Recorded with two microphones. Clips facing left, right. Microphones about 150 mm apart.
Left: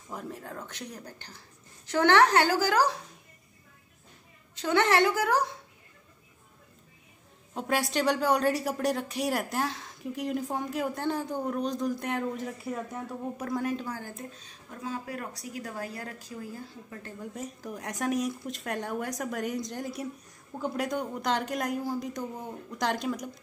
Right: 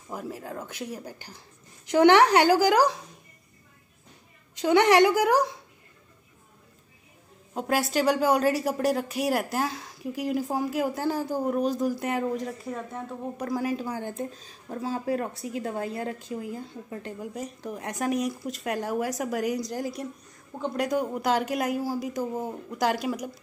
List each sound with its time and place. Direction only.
0.1 s speech: 5° right (ahead or behind)
4.6 s speech: 15° right (ahead or behind)
7.5 s a woman's voice: centre (ahead or behind)
13.9 s a woman's voice: 25° right (ahead or behind)
14.3 s a woman's voice: 35° right (ahead or behind)
17.2 s a woman's voice: 5° right (ahead or behind)